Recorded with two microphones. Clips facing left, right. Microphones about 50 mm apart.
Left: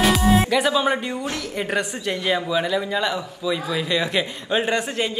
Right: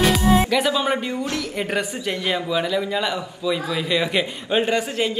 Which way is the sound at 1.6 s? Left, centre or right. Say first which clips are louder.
Left 2 dB; centre.